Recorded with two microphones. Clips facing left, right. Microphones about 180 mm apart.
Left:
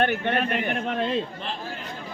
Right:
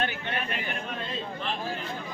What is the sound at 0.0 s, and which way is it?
Speech, 60° left (ahead or behind).